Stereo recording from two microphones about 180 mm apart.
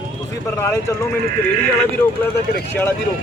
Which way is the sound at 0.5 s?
15° left (ahead or behind).